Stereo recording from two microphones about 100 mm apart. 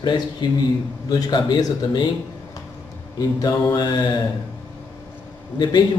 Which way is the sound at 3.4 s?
40° left (ahead or behind).